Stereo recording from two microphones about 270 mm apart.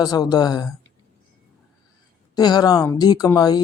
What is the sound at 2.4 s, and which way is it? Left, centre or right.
A woman's voice, centre.